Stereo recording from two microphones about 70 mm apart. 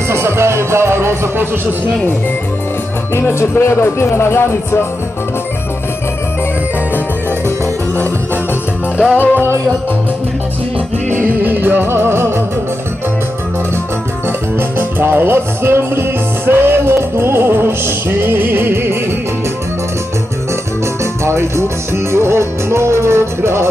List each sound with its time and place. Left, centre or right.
0.1 s music: right
3.2 s speech: left
7.4 s music: right
9.1 s music: left
11.1 s music: right
14.8 s music: right
21.0 s music: right